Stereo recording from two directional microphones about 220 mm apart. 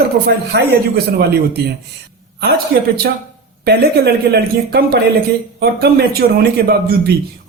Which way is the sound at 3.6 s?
45° right (ahead or behind).